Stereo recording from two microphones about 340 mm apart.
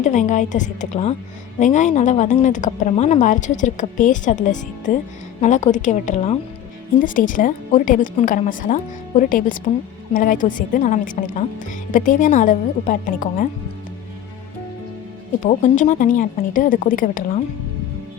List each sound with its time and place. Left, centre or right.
0.0 s a woman's voice: left
15.4 s a woman's voice: left